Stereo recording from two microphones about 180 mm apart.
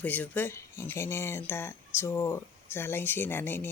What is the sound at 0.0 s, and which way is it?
Speech, 10° left (ahead or behind).